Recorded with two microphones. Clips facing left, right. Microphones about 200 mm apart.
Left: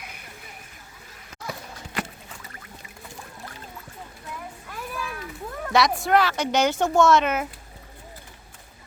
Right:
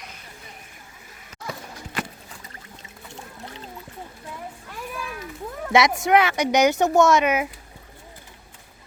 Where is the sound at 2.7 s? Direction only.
25° right (ahead or behind).